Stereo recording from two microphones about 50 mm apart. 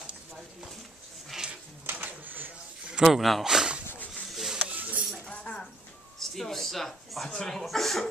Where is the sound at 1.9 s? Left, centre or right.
Right.